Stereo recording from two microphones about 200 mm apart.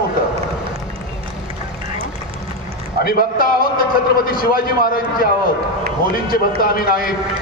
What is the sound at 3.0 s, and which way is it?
A man's voice, 50° left (ahead or behind).